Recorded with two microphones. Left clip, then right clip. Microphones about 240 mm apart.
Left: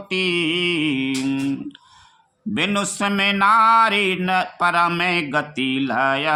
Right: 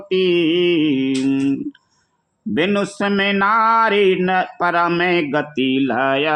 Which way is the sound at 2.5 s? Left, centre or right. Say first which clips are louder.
Right 3 dB; centre.